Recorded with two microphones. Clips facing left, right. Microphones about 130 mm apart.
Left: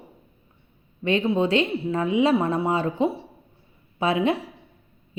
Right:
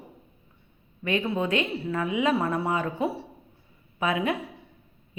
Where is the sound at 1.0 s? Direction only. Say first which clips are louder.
Left 5 dB; 25° left (ahead or behind).